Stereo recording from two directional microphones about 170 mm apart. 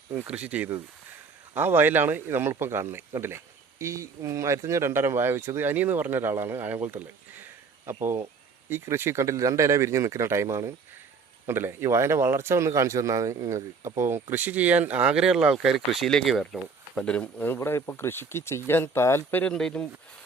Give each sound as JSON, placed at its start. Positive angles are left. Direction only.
{"t": 0.1, "sound": "speech", "side_deg": -10}